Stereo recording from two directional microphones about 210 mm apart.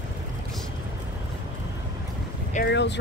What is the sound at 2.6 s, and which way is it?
Speech, 55° left (ahead or behind).